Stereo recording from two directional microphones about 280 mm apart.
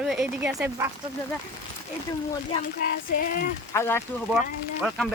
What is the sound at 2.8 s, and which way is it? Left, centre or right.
Child singing, left.